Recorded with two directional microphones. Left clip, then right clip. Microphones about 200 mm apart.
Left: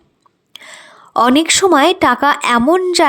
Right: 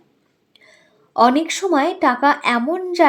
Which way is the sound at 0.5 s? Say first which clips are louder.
Left 15 dB; 30° left (ahead or behind).